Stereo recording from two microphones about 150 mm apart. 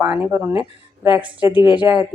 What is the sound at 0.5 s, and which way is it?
Speech, 35° left (ahead or behind).